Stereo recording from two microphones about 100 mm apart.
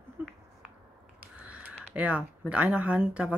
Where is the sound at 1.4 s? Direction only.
15° right (ahead or behind).